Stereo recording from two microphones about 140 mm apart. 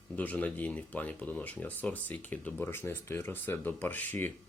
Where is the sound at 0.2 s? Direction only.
10° left (ahead or behind).